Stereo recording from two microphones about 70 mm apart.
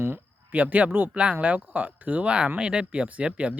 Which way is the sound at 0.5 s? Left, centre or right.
Right.